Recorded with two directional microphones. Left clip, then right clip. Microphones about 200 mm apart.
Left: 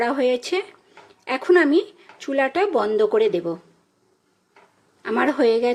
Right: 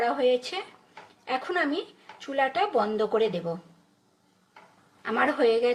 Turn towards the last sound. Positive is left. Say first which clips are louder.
# left 4 dB
turn(degrees=35)  # may be behind; listen again after turning